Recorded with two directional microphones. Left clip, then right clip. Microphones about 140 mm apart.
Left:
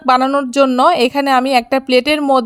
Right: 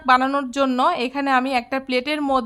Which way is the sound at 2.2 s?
30° left (ahead or behind).